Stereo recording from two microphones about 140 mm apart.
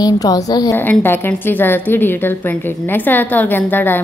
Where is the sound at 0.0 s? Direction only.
25° left (ahead or behind).